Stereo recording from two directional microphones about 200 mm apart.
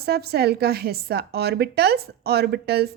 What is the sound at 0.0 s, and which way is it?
A woman's voice, 50° right (ahead or behind).